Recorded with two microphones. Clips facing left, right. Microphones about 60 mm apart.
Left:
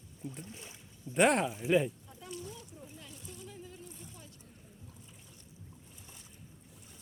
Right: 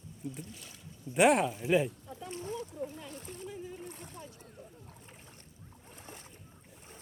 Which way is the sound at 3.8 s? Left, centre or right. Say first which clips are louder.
Right 5 dB; right.